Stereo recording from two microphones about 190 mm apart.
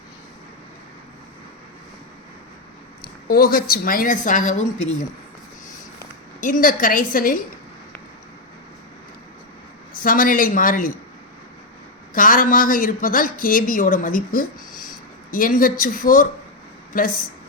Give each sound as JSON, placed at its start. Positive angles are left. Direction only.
{"t": 3.0, "sound": "a woman's voice", "side_deg": 50}
{"t": 6.4, "sound": "a woman's voice", "side_deg": 45}
{"t": 9.9, "sound": "a woman's voice", "side_deg": 45}
{"t": 12.1, "sound": "a woman's voice", "side_deg": 45}